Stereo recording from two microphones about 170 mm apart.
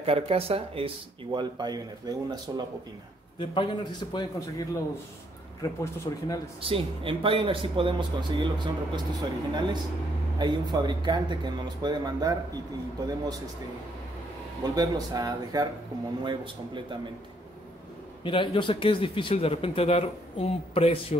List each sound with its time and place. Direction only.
0.0 s speech: 35° right (ahead or behind)
3.3 s a man's voice: 30° left (ahead or behind)
6.6 s speech: 30° right (ahead or behind)
14.8 s speech: 20° right (ahead or behind)
18.2 s speech: 30° left (ahead or behind)